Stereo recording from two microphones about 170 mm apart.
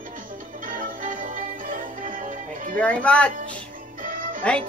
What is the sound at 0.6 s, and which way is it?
Music, 55° right (ahead or behind).